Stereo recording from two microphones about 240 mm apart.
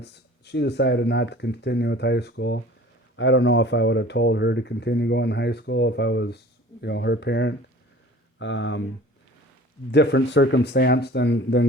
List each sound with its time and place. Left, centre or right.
0.0 s speech: left
9.9 s speech: left